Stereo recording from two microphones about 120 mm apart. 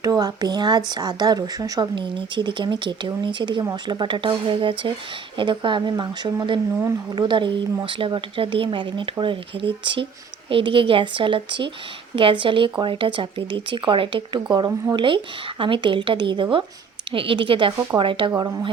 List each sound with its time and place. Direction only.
0.0 s speech: 30° right (ahead or behind)
18.3 s speech: 25° right (ahead or behind)